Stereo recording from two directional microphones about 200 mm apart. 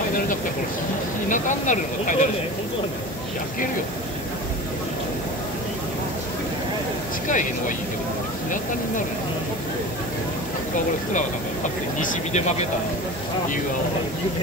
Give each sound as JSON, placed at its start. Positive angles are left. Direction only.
{"t": 1.3, "sound": "speech", "side_deg": 40}
{"t": 7.2, "sound": "speech", "side_deg": 40}
{"t": 12.0, "sound": "speech", "side_deg": 40}